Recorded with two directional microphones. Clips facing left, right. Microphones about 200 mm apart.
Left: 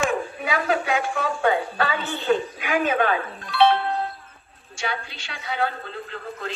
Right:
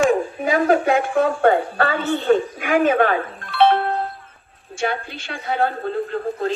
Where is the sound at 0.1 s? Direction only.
45° right (ahead or behind).